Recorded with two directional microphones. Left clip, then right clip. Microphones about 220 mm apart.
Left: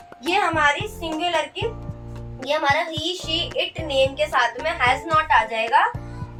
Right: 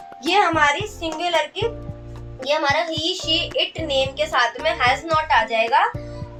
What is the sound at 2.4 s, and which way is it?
Speech, centre (ahead or behind).